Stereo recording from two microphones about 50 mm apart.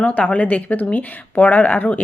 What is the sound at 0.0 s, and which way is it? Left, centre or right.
Speech, left.